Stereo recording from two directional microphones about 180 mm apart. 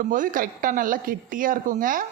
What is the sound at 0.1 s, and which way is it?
A woman's voice, 50° right (ahead or behind).